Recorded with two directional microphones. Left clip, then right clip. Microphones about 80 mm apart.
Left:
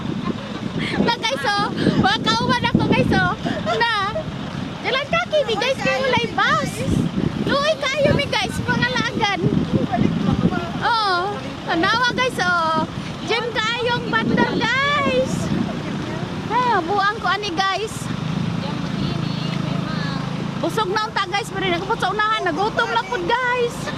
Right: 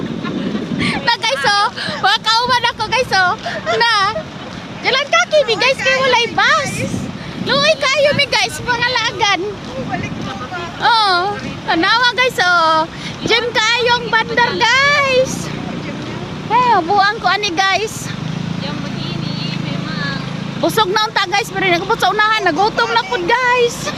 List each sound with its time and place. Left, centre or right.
0.8 s vehicle: right
4.9 s a sound: right
6.1 s speech: right
7.9 s speech: right
8.7 s speech: right
10.8 s speech: right
12.5 s speech: right
14.6 s speech: right
16.5 s speech: right
20.6 s speech: right
22.6 s speech: right
23.5 s speech: right